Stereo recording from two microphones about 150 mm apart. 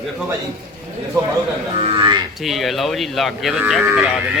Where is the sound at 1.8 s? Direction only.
35° right (ahead or behind).